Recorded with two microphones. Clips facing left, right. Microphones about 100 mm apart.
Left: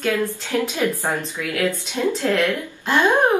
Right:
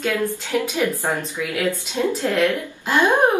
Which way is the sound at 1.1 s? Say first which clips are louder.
Right 1 dB; 15° right (ahead or behind).